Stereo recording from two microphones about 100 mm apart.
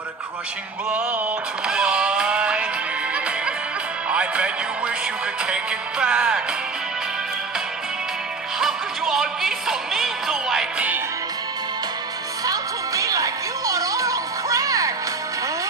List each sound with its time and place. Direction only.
0.8 s music: 15° right (ahead or behind)
4.1 s music: 10° right (ahead or behind)
8.5 s music: 5° right (ahead or behind)
12.4 s music: 35° right (ahead or behind)